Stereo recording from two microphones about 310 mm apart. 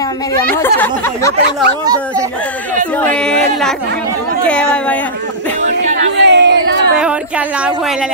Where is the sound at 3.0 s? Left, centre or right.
Centre.